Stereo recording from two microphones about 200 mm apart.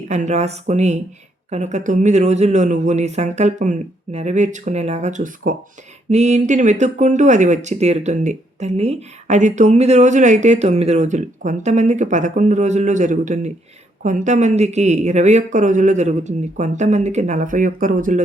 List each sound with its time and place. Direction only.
0.1 s speech: 35° right (ahead or behind)